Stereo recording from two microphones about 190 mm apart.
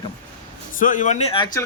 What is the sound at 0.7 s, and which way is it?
Speech, 45° left (ahead or behind).